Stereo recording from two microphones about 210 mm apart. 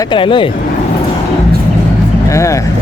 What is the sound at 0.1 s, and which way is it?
Speech, 25° left (ahead or behind).